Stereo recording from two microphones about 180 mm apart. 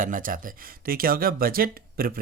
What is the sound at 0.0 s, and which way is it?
Speech, 50° right (ahead or behind).